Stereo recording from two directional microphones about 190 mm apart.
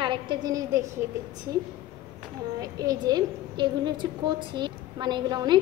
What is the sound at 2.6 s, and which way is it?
A woman's voice, 20° right (ahead or behind).